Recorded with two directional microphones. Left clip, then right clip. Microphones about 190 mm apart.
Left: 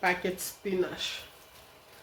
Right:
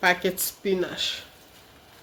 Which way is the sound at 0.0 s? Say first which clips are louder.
Right 6 dB; 65° right (ahead or behind).